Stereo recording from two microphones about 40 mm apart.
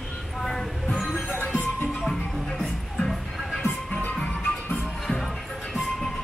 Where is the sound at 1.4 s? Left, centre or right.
Left.